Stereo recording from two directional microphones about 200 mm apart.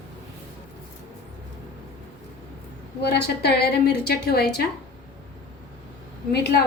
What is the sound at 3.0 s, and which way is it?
A woman's voice, 55° left (ahead or behind).